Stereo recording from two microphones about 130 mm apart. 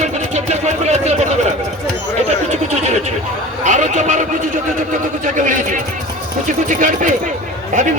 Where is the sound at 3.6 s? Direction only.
70° right (ahead or behind).